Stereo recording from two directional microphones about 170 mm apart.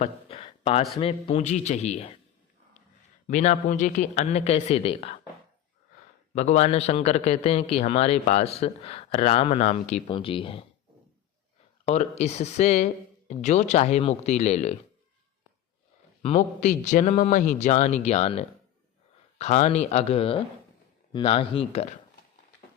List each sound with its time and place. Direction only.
0.0 s a sound: 30° left (ahead or behind)
0.9 s a man's voice: 35° left (ahead or behind)
3.2 s a man's voice: 45° left (ahead or behind)
6.3 s a man's voice: 40° left (ahead or behind)
10.1 s a man's voice: 30° left (ahead or behind)
11.9 s a man's voice: 40° left (ahead or behind)
16.3 s a man's voice: 45° left (ahead or behind)